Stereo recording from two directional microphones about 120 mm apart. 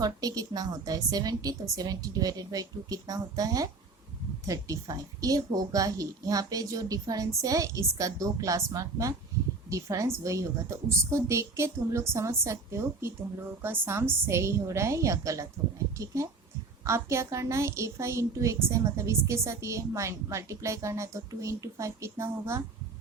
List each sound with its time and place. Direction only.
0.0 s a woman's voice: 30° right (ahead or behind)